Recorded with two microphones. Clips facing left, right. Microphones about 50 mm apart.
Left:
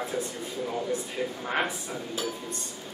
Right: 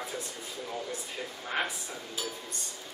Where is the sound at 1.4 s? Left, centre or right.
Centre.